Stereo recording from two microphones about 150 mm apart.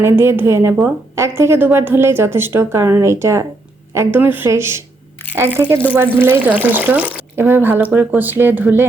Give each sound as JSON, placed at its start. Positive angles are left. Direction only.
{"t": 0.0, "sound": "speech", "side_deg": -15}